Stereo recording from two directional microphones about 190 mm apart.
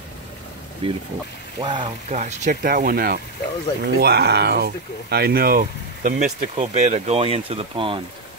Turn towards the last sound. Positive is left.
turn(degrees=-30)  # may be behind; listen again after turning